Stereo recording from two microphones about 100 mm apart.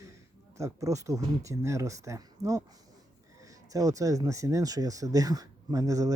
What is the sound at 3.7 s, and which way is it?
Speech, 35° right (ahead or behind).